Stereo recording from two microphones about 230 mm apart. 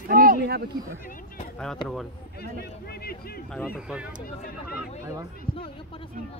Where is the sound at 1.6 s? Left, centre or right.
Centre.